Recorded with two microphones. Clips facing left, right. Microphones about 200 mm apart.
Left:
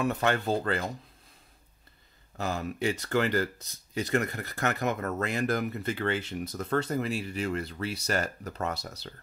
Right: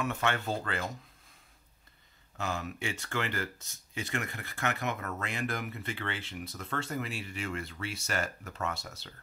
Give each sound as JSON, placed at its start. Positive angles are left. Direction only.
{"t": 0.0, "sound": "speech", "side_deg": 35}
{"t": 2.3, "sound": "speech", "side_deg": 35}